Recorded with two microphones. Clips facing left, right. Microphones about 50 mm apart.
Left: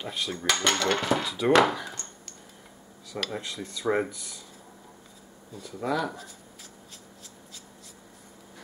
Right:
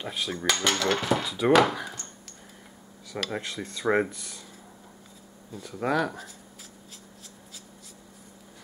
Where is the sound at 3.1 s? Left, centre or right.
Right.